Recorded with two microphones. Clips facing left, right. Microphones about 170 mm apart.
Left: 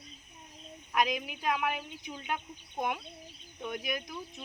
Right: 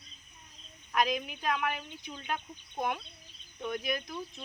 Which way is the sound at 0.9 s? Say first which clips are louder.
Even; 15° left (ahead or behind).